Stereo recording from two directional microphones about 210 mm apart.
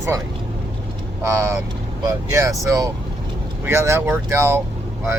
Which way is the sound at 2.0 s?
15° right (ahead or behind).